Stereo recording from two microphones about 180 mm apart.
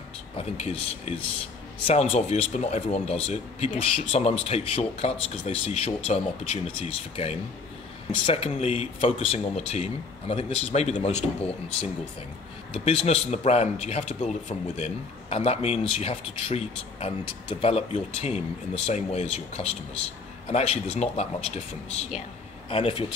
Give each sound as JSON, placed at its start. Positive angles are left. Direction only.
{"t": 0.6, "sound": "speech", "side_deg": 35}